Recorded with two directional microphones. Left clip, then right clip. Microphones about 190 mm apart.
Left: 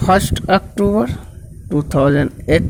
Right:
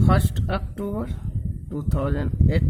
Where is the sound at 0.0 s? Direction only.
30° left (ahead or behind).